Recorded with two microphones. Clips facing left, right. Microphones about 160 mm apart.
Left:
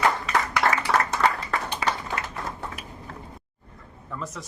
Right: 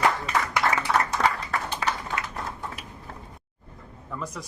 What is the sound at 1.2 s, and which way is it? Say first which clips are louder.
Applause: left 2 dB; 80° right.